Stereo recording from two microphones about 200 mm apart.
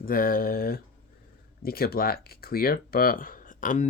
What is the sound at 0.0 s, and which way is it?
Speech, 45° left (ahead or behind).